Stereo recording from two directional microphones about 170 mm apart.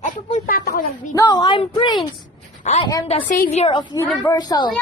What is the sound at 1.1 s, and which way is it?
Speech, 25° left (ahead or behind).